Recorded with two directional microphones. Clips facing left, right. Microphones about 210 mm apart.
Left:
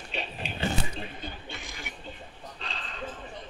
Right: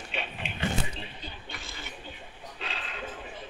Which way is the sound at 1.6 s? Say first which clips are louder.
Left 1 dB; 15° left (ahead or behind).